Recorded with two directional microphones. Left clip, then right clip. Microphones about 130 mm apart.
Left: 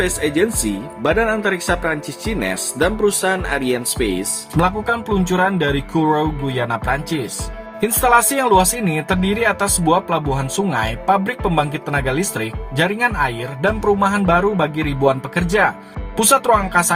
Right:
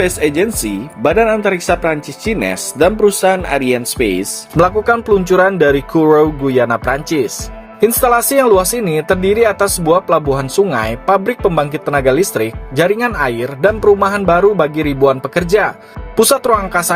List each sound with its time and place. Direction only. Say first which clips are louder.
0.0 s speech: right 4 dB; 40° right (ahead or behind)
4.5 s speech: right 7 dB; 50° right (ahead or behind)
7.8 s speech: right 3 dB; 40° right (ahead or behind)